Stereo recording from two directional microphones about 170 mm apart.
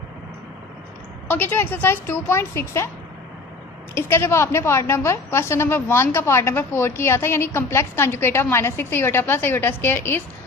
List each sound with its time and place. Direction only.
1.3 s a woman's voice: 10° left (ahead or behind)
3.9 s a woman's voice: 15° left (ahead or behind)